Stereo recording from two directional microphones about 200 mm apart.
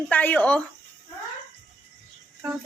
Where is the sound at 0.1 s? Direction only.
10° left (ahead or behind).